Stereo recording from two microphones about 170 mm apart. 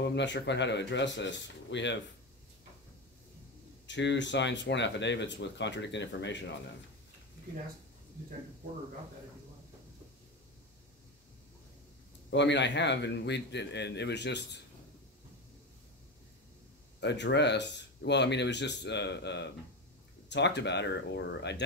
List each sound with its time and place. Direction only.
0.0 s speech: 90° left
3.8 s speech: 90° left
12.3 s speech: 90° left
17.0 s speech: 90° left